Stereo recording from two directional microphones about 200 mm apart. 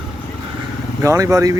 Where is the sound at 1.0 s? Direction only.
15° right (ahead or behind).